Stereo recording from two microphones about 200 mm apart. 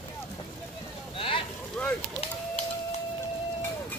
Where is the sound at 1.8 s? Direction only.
5° left (ahead or behind).